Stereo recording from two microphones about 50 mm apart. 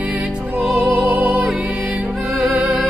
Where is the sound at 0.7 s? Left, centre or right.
Right.